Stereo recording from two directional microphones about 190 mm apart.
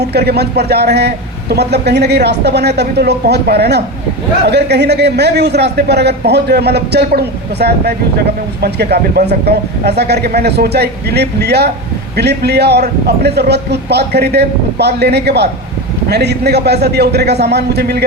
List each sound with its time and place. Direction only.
0.0 s a man's voice: 60° right (ahead or behind)